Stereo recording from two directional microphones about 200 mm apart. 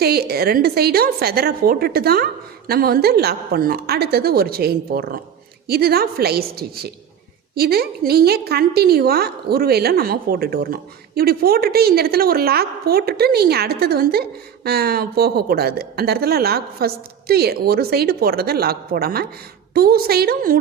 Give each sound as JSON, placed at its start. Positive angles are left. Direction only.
{"t": 0.0, "sound": "a woman's voice", "side_deg": -50}
{"t": 7.5, "sound": "a woman's voice", "side_deg": -50}